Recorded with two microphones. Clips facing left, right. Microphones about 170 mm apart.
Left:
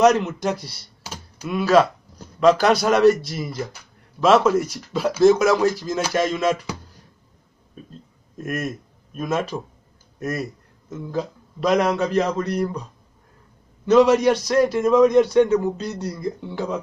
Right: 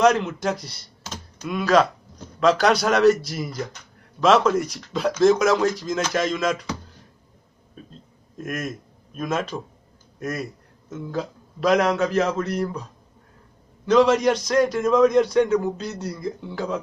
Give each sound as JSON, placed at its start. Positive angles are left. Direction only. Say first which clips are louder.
{"t": 0.0, "sound": "speech", "louder": "left 2 dB", "side_deg": 5}
{"t": 8.4, "sound": "a man's voice", "louder": "left 2 dB", "side_deg": 5}
{"t": 13.8, "sound": "a man's voice", "louder": "left 2 dB", "side_deg": 5}